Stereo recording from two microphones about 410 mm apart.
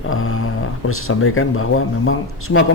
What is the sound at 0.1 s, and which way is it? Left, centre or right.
Speech, left.